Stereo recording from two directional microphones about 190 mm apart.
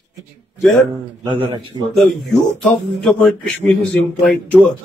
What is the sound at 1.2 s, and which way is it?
Speech, 25° right (ahead or behind).